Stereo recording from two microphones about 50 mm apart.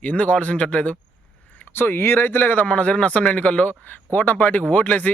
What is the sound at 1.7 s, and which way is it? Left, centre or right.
Speech, left.